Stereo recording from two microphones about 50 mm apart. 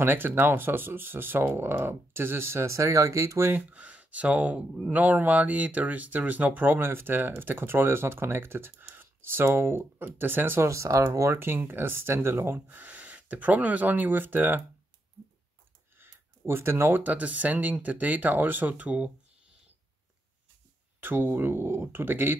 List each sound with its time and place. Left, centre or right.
0.0 s speech: right
2.7 s speech: right
3.7 s speech: right
10.6 s speech: right
11.3 s speech: right
16.0 s a sound: right
17.0 s speech: right
21.0 s speech: right